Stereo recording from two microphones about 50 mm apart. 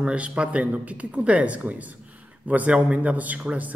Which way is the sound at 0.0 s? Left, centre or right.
Right.